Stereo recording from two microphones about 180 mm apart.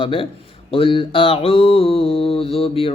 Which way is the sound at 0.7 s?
30° left (ahead or behind).